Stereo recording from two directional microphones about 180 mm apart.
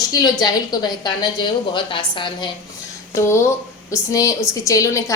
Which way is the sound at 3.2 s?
15° left (ahead or behind).